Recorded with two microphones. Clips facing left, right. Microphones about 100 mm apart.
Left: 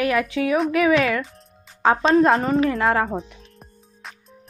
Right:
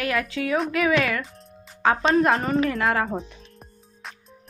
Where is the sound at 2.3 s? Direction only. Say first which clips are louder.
Left 3 dB; centre (ahead or behind).